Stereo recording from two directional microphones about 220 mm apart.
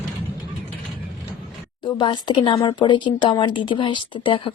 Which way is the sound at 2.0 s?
20° left (ahead or behind).